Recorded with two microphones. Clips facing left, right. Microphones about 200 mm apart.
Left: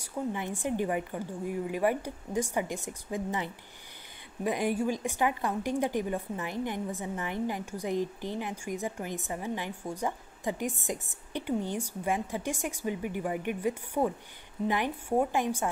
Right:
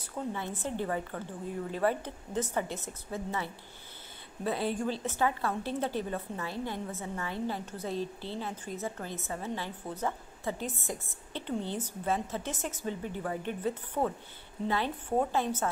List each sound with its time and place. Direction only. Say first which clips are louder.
0.0 s a woman's voice: left 3 dB; 15° left (ahead or behind)